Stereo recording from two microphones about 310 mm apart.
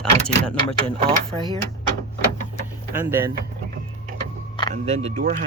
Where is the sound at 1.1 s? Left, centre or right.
Centre.